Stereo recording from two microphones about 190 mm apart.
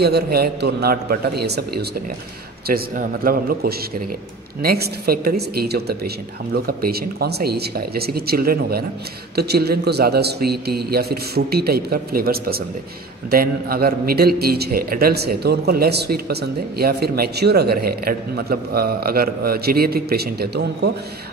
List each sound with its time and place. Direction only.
0.0 s a man's voice: 55° right (ahead or behind)